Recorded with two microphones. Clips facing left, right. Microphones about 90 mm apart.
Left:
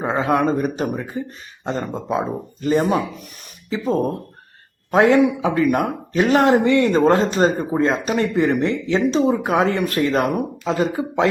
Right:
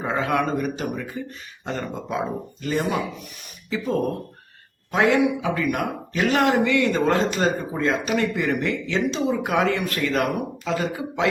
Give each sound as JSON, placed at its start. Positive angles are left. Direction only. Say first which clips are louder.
{"t": 0.0, "sound": "speech", "louder": "left 4 dB", "side_deg": 25}
{"t": 4.9, "sound": "speech", "louder": "left 5 dB", "side_deg": 40}